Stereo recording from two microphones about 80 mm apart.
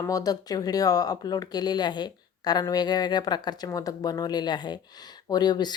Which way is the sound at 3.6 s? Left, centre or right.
Left.